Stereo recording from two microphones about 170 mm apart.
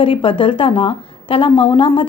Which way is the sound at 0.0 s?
30° left (ahead or behind).